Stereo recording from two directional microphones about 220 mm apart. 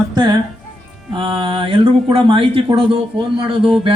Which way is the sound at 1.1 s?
20° right (ahead or behind).